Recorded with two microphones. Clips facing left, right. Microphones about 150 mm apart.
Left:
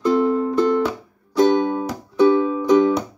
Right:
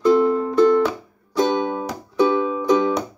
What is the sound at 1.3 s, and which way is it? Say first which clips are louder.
Music: left 4 dB; 15° right (ahead or behind).